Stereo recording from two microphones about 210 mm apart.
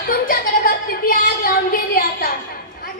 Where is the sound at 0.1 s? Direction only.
45° left (ahead or behind).